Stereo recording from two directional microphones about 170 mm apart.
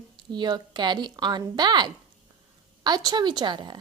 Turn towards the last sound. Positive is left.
turn(degrees=-25)  # may be behind; listen again after turning